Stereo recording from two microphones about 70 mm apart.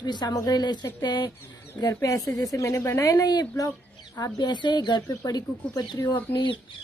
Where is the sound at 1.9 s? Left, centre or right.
Left.